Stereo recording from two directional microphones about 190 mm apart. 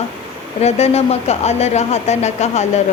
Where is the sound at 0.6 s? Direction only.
35° left (ahead or behind).